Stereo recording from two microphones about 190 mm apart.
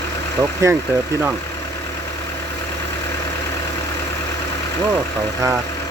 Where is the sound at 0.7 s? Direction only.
15° right (ahead or behind).